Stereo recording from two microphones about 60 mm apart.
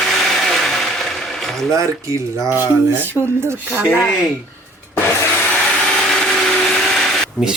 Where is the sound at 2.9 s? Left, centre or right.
Right.